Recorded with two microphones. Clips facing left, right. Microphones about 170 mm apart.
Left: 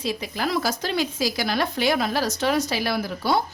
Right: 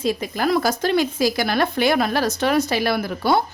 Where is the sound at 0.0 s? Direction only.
50° right (ahead or behind).